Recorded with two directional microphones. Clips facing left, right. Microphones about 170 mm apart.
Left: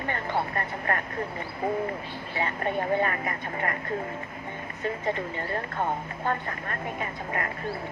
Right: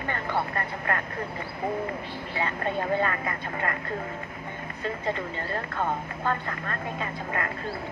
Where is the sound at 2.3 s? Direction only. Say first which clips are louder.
Left 1 dB; 20° left (ahead or behind).